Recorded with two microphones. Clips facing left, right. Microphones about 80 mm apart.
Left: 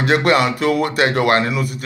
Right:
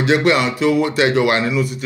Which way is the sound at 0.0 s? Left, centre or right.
Left.